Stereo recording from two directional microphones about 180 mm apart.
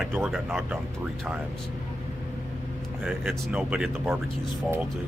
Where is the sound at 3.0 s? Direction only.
5° right (ahead or behind).